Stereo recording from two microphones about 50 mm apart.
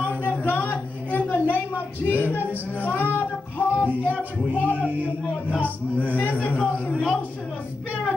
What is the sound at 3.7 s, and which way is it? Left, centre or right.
Music, left.